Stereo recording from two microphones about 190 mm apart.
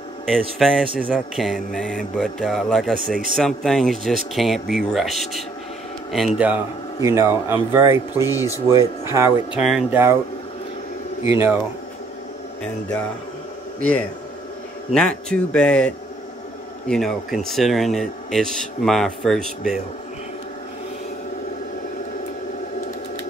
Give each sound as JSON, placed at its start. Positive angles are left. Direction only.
{"t": 0.3, "sound": "speech", "side_deg": 0}
{"t": 8.3, "sound": "speech", "side_deg": 15}
{"t": 8.6, "sound": "speech", "side_deg": -15}
{"t": 9.6, "sound": "speech", "side_deg": -5}
{"t": 11.2, "sound": "speech", "side_deg": -15}
{"t": 13.7, "sound": "speech", "side_deg": 5}